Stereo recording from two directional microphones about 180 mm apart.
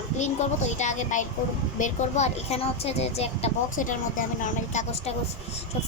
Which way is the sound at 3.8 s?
45° left (ahead or behind).